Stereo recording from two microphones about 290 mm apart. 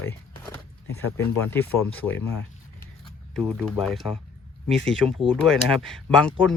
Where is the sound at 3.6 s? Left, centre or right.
Centre.